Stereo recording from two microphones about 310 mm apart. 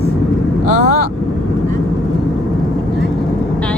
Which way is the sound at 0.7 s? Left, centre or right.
Left.